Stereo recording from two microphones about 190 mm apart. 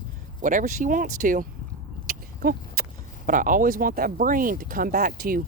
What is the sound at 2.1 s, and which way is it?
Vehicle, 50° right (ahead or behind).